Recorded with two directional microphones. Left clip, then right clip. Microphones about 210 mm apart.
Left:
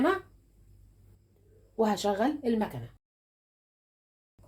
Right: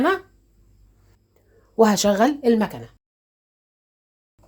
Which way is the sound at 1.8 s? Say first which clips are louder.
Right 11 dB; 50° right (ahead or behind).